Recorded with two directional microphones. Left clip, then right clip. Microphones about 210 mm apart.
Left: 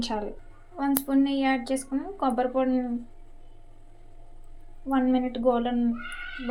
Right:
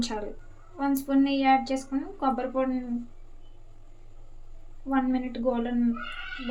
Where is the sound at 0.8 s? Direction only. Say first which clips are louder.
Even; 20° left (ahead or behind).